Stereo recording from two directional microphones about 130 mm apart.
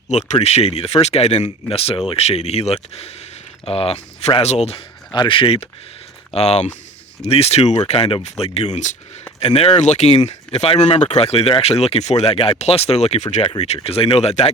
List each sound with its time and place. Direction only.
0.1 s speech: 60° left (ahead or behind)
5.1 s speech: 40° left (ahead or behind); by 9.0 s 65° left (ahead or behind)
9.4 s speech: 50° left (ahead or behind)
13.8 s speech: 45° left (ahead or behind)